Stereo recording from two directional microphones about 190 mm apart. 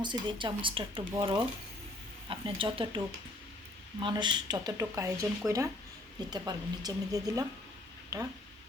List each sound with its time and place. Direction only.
0.0 s speech: 25° right (ahead or behind)
4.0 s speech: 25° right (ahead or behind)
5.4 s speech: centre (ahead or behind)
6.1 s speech: 20° right (ahead or behind)